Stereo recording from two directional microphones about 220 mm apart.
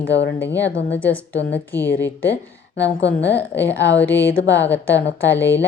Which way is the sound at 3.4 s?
10° left (ahead or behind).